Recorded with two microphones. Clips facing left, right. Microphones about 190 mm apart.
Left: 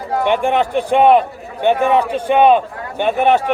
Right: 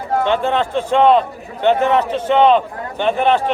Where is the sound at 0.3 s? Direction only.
15° left (ahead or behind).